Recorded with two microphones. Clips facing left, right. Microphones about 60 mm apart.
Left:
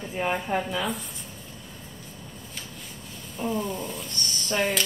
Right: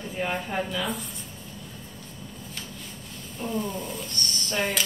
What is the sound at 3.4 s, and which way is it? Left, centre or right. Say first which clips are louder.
Speech: left 2 dB; centre.